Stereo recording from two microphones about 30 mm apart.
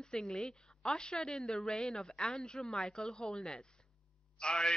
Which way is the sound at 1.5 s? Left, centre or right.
Centre.